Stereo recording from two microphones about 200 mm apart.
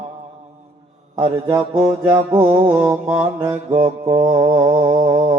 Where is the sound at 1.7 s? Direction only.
10° right (ahead or behind).